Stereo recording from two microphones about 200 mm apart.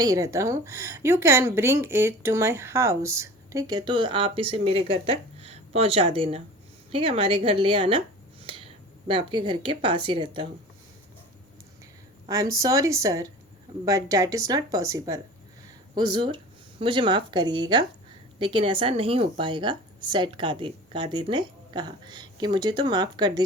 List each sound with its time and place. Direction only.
0.0 s speech: 15° right (ahead or behind)
12.3 s a woman's voice: 15° right (ahead or behind)